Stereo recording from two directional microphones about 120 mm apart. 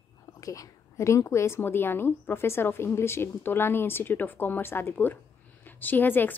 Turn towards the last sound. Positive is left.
turn(degrees=15)  # may be behind; listen again after turning